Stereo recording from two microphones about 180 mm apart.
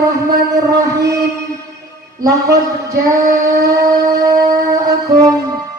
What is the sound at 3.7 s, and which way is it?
Music, 20° right (ahead or behind).